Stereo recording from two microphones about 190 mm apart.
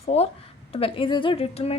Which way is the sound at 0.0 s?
35° left (ahead or behind).